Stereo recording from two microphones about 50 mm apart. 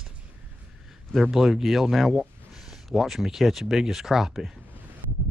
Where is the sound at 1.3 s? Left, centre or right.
Centre.